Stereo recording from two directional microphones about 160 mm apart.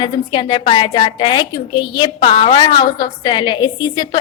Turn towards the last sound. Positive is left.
turn(degrees=25)  # may be behind; listen again after turning